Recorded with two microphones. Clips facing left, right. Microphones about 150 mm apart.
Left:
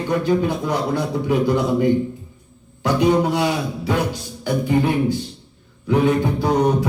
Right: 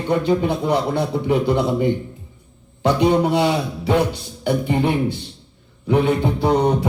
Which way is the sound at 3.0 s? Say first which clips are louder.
Even; 25° right (ahead or behind).